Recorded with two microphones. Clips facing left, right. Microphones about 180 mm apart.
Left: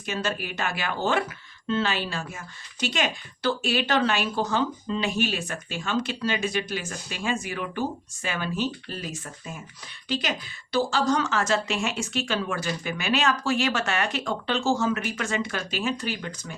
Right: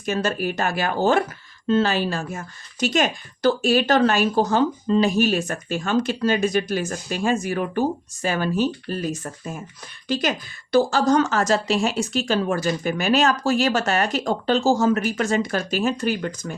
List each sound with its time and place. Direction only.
0.0 s a woman's voice: 40° right (ahead or behind)